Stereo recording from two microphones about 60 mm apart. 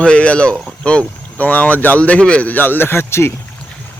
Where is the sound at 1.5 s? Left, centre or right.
Left.